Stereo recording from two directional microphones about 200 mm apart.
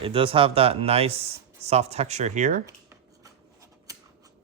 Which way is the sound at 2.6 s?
15° right (ahead or behind).